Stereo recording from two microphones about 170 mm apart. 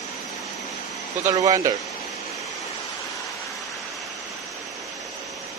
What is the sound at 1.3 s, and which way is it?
Speech, 20° right (ahead or behind).